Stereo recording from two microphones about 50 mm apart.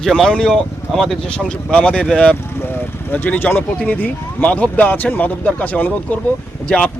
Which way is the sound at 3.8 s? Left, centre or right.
Left.